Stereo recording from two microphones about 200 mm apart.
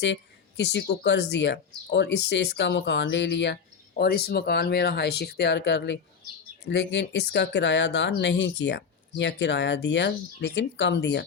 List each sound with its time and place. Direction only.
0.0 s speech: 60° left (ahead or behind)